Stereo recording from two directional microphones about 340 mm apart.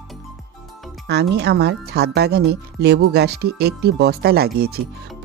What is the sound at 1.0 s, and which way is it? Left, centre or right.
Speech, right.